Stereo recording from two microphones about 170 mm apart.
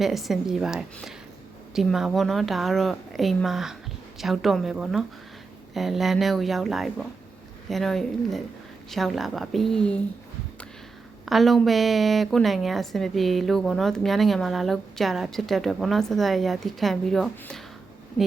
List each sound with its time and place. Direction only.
0.0 s a woman's voice: centre (ahead or behind)
11.3 s a woman's voice: centre (ahead or behind)